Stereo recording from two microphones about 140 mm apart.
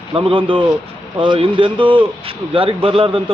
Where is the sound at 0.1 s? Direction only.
40° right (ahead or behind).